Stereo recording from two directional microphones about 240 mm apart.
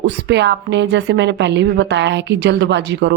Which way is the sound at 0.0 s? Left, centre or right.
Right.